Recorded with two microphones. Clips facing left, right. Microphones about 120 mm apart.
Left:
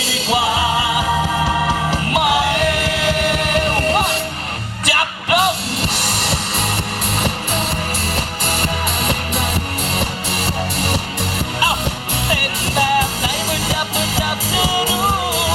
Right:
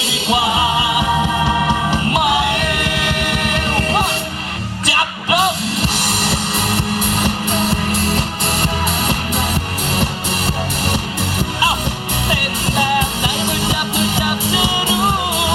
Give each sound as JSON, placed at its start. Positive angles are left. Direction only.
{"t": 2.6, "sound": "music", "side_deg": 35}
{"t": 4.9, "sound": "music", "side_deg": -30}